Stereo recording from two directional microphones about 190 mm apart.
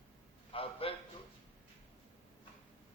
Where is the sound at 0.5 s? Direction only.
30° left (ahead or behind).